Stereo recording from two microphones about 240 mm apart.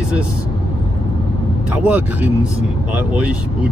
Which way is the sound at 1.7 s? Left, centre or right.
Centre.